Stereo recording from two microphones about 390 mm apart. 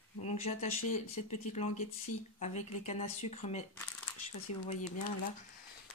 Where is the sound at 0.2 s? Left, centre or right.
Centre.